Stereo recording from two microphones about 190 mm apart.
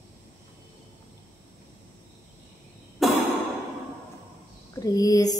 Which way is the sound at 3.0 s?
Centre (ahead or behind).